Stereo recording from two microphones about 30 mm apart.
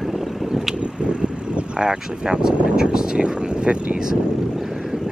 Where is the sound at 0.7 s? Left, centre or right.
Right.